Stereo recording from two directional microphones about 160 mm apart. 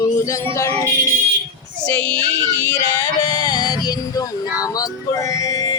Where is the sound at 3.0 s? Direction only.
20° left (ahead or behind).